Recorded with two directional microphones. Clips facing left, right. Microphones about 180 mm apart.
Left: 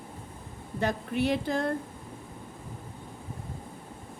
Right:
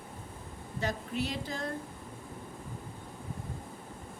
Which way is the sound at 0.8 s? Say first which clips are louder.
Left 6 dB; 60° left (ahead or behind).